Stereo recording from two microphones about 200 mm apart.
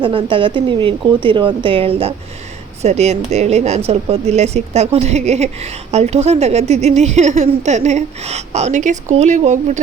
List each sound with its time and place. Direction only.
0.0 s speech: 25° right (ahead or behind)